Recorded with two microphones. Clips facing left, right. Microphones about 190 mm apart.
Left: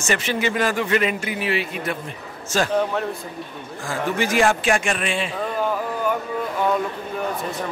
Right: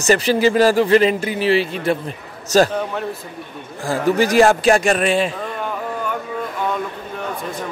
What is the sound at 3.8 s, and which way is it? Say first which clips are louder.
Speech: right 7 dB; 35° right (ahead or behind).